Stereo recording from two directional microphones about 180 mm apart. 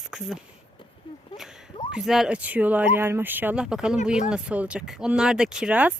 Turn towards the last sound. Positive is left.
turn(degrees=-10)  # may be behind; listen again after turning